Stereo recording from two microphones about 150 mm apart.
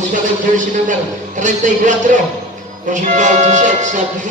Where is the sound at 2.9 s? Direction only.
55° right (ahead or behind).